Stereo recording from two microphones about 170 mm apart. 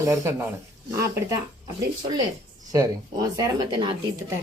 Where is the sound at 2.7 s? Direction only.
20° right (ahead or behind).